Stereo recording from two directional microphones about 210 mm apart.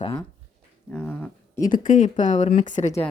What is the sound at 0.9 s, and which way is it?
Speech, 5° left (ahead or behind).